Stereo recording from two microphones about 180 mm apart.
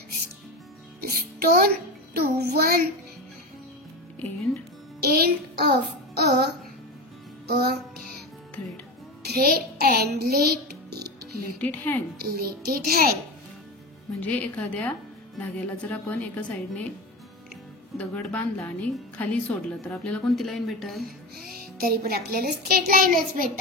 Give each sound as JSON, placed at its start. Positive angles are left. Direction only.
{"t": 1.0, "sound": "a child's voice", "side_deg": -55}
{"t": 5.0, "sound": "child singing", "side_deg": -60}
{"t": 7.4, "sound": "music", "side_deg": -55}
{"t": 9.3, "sound": "a child's voice", "side_deg": -55}
{"t": 11.6, "sound": "a woman's voice", "side_deg": 10}
{"t": 12.2, "sound": "a child's voice", "side_deg": -60}
{"t": 14.2, "sound": "a woman's voice", "side_deg": 5}
{"t": 17.9, "sound": "a woman's voice", "side_deg": 5}
{"t": 21.7, "sound": "a child's voice", "side_deg": -60}